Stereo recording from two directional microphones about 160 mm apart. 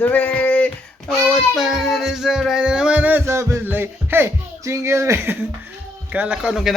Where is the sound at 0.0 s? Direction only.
10° left (ahead or behind); by 5.5 s 15° right (ahead or behind).